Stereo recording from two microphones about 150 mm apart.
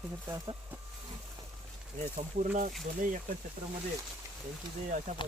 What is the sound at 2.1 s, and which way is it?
Speech, 60° right (ahead or behind).